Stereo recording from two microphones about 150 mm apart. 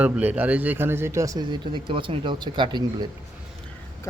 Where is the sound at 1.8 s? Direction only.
35° right (ahead or behind).